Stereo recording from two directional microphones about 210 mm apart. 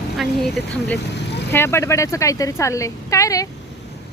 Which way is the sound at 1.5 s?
10° left (ahead or behind).